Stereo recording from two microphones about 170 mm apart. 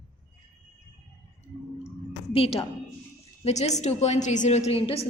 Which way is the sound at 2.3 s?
35° left (ahead or behind).